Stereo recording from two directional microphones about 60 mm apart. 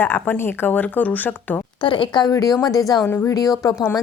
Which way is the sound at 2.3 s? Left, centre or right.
Left.